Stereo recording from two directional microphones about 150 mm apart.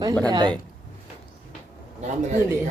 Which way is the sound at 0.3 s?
30° right (ahead or behind).